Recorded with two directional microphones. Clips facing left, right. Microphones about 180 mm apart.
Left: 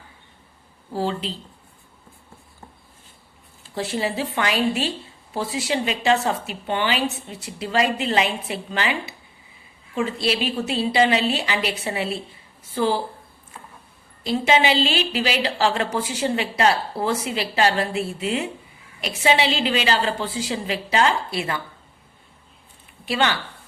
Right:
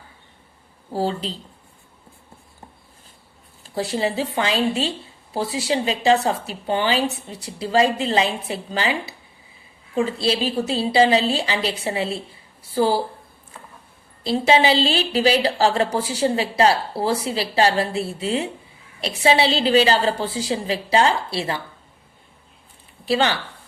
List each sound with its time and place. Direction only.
0.9 s a woman's voice: 40° right (ahead or behind)
3.8 s a woman's voice: 30° right (ahead or behind)
14.3 s a woman's voice: 35° right (ahead or behind)
23.0 s a woman's voice: 35° right (ahead or behind)